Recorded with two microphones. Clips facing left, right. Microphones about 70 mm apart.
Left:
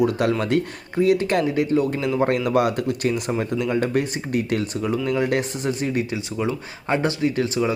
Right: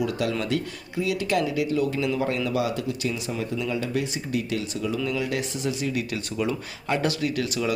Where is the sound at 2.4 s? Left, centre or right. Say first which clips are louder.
Left 6 dB; left.